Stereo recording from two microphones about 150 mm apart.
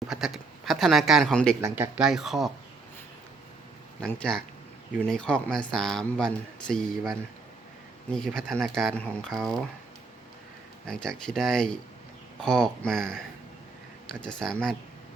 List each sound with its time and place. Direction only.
0.1 s a sound: centre (ahead or behind)
1.6 s speech: 15° right (ahead or behind)
2.0 s speech: 5° right (ahead or behind)
4.0 s speech: 5° left (ahead or behind)
10.8 s speech: 5° left (ahead or behind)